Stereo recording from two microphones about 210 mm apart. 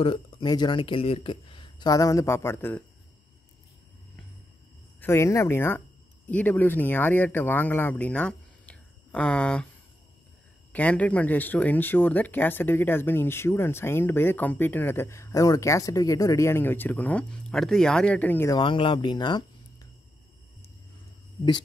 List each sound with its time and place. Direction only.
0.0 s speech: 25° left (ahead or behind)
5.0 s speech: 15° left (ahead or behind)
10.7 s speech: 5° left (ahead or behind)
18.6 s speech: 25° left (ahead or behind)